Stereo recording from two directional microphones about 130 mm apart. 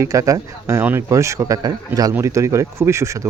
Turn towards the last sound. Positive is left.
turn(degrees=-25)  # may be behind; listen again after turning